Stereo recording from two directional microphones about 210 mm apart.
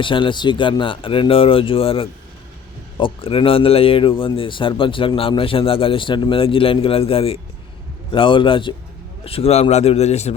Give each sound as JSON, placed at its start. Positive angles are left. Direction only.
{"t": 0.0, "sound": "a man's voice", "side_deg": 25}